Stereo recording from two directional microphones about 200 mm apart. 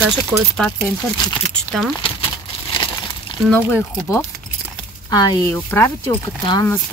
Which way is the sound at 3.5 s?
10° left (ahead or behind).